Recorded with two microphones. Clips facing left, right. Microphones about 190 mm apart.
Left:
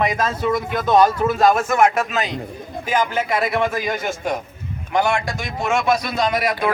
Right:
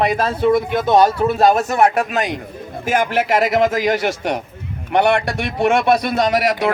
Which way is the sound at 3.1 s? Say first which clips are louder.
Right 4 dB; 80° right.